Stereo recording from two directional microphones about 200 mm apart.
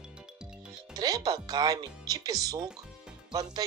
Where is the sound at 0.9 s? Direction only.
20° right (ahead or behind).